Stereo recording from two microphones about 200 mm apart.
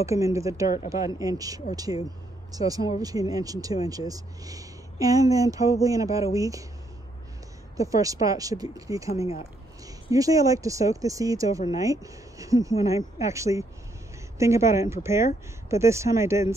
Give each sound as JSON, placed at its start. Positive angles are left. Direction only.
{"t": 0.0, "sound": "speech", "side_deg": -15}
{"t": 7.7, "sound": "speech", "side_deg": -15}
{"t": 10.1, "sound": "speech", "side_deg": -15}